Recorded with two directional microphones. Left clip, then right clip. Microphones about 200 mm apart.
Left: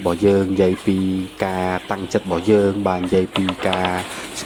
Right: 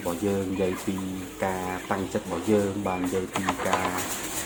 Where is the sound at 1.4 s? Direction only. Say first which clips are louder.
Left 7 dB; 40° left (ahead or behind).